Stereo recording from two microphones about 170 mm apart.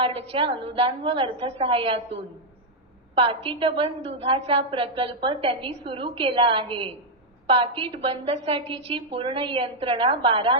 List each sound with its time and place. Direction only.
0.0 s a woman's voice: 35° right (ahead or behind)
3.2 s a woman's voice: 30° right (ahead or behind)